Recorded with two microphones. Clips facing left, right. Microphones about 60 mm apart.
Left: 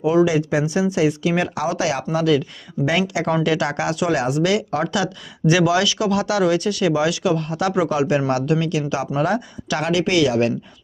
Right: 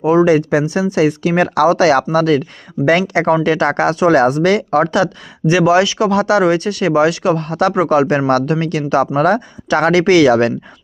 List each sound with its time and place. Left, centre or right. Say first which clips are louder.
0.0 s speech: right 5 dB; right
2.1 s speech: right 5 dB; right
6.1 s speech: right 6 dB; right